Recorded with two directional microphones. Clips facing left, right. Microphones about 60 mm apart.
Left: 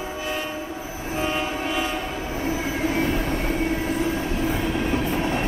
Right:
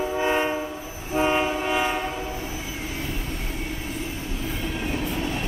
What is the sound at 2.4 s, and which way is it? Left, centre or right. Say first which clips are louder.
Vehicle: left 8 dB; left.